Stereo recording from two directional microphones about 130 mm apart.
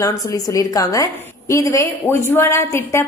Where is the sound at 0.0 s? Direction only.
25° left (ahead or behind).